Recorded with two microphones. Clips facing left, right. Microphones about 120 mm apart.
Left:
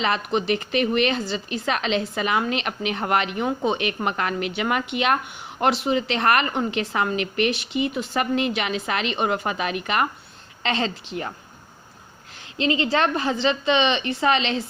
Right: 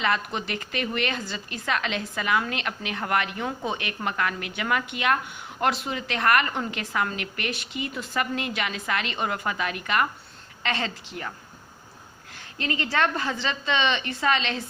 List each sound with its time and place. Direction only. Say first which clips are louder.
0.0 s a woman's voice: left 4 dB; 20° left (ahead or behind)
12.8 s a woman's voice: left 1 dB; 20° left (ahead or behind)